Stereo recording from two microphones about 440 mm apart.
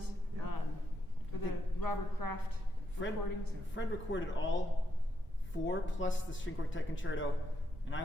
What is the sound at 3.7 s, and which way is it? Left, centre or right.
Speech, left.